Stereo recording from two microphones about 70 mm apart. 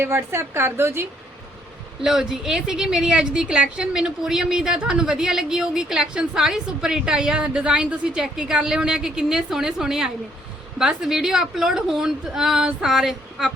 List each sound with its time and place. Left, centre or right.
0.0 s a woman's voice: right
2.0 s a woman's voice: centre